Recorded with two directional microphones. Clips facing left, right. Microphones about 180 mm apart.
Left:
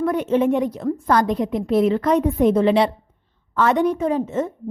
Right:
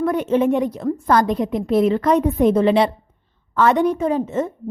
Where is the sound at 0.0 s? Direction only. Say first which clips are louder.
Right 1 dB; 40° right (ahead or behind).